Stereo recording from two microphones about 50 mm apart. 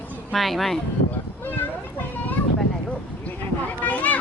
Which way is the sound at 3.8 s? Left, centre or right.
Left.